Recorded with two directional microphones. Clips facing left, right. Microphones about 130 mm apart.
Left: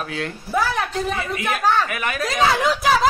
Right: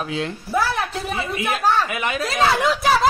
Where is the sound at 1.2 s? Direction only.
25° right (ahead or behind).